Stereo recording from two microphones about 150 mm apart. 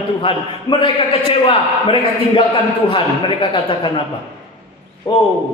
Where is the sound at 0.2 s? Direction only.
35° left (ahead or behind).